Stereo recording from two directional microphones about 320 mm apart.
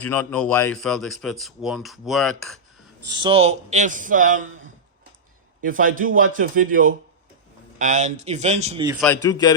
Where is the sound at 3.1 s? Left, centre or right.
Centre.